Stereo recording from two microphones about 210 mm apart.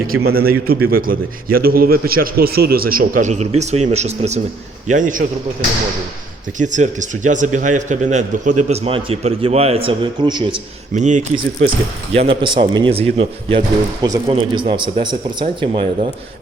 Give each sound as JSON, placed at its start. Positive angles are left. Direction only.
{"t": 0.2, "sound": "a man's voice", "side_deg": -45}
{"t": 6.6, "sound": "a man's voice", "side_deg": -35}
{"t": 10.9, "sound": "a man's voice", "side_deg": -35}